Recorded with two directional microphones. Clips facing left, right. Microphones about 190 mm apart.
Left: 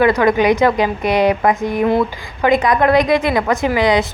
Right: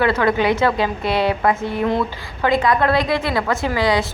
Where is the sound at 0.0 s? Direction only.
15° left (ahead or behind).